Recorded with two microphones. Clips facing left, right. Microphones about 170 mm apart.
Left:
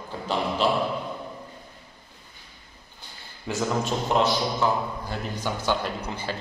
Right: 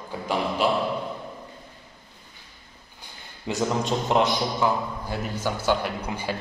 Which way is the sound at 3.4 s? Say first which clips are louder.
Right 1 dB; 15° right (ahead or behind).